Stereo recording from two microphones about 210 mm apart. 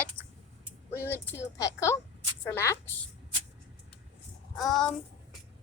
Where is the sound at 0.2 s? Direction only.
5° left (ahead or behind).